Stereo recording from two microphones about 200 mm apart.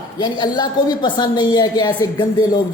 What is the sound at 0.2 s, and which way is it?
A woman's voice, 20° left (ahead or behind).